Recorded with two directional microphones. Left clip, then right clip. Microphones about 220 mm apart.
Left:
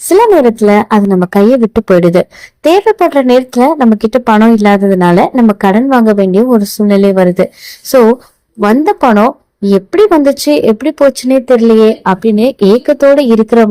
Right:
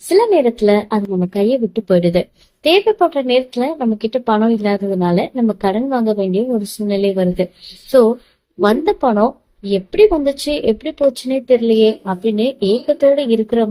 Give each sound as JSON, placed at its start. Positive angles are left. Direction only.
{"t": 0.1, "sound": "speech", "side_deg": 40}
{"t": 1.3, "sound": "speech", "side_deg": 40}